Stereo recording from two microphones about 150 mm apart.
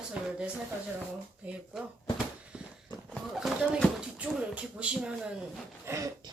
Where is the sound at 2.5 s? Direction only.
10° right (ahead or behind).